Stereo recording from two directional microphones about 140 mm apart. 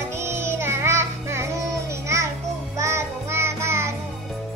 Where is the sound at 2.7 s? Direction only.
20° right (ahead or behind).